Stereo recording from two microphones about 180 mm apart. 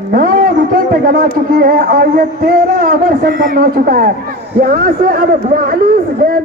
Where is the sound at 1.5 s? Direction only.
55° right (ahead or behind).